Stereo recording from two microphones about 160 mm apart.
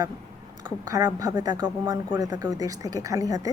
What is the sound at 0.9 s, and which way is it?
A woman's voice, 20° right (ahead or behind).